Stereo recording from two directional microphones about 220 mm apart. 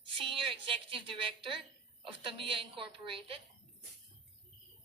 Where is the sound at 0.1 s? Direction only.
25° right (ahead or behind).